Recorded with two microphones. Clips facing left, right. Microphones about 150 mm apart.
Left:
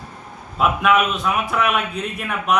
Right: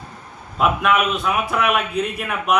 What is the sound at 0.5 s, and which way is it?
A man's voice, centre (ahead or behind).